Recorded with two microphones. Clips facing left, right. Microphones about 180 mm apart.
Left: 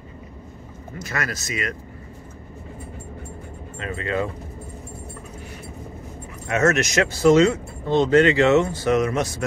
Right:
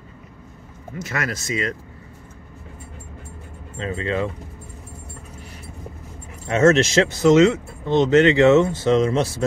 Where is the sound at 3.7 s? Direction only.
30° right (ahead or behind).